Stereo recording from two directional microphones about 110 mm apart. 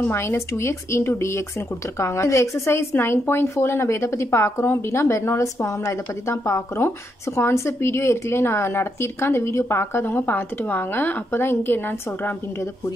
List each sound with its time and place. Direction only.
0.0 s speech: 20° left (ahead or behind)